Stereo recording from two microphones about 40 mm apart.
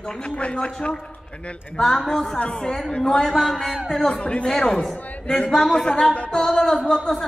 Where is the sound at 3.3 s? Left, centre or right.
Centre.